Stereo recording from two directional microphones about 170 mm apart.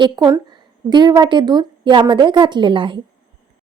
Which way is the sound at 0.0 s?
25° right (ahead or behind).